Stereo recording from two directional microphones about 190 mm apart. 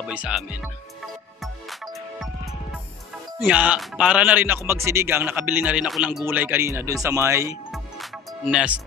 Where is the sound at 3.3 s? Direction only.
5° right (ahead or behind).